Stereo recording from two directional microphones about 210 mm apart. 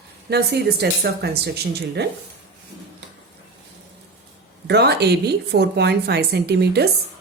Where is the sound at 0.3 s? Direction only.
50° right (ahead or behind).